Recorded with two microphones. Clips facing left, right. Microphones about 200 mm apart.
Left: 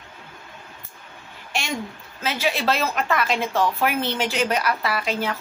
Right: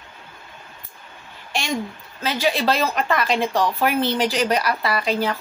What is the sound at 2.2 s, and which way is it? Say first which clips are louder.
A woman's voice: right 3 dB; 5° left (ahead or behind).